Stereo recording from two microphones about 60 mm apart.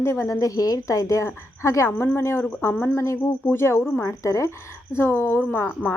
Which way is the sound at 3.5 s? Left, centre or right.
Left.